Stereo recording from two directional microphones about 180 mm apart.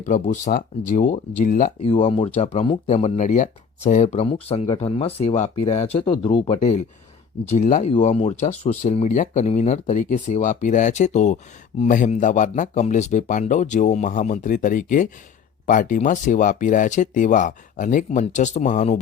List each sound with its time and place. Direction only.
0.0 s speech: 40° left (ahead or behind)
1.8 s speech: 35° left (ahead or behind)